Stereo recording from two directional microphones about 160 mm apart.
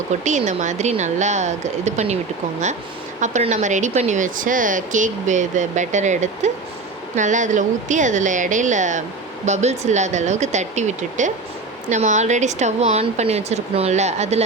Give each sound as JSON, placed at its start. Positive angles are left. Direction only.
{"t": 0.3, "sound": "speech", "side_deg": -45}
{"t": 3.2, "sound": "speech", "side_deg": -50}